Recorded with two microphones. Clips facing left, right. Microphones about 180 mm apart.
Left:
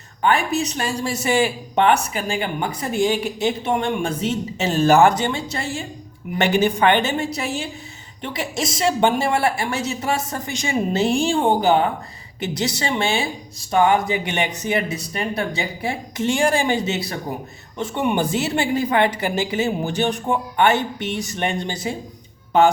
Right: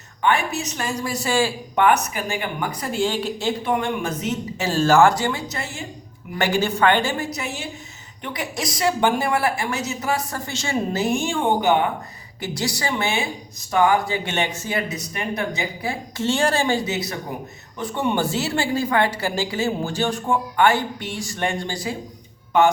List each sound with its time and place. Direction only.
0.2 s speech: 35° left (ahead or behind)
6.3 s speech: 20° left (ahead or behind)
11.0 s speech: 30° left (ahead or behind)
12.4 s speech: 20° left (ahead or behind)